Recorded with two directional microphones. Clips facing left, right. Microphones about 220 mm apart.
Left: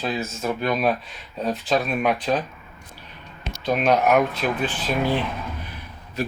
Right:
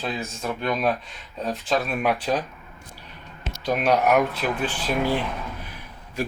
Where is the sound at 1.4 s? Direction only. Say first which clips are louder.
Left 2 dB; centre (ahead or behind).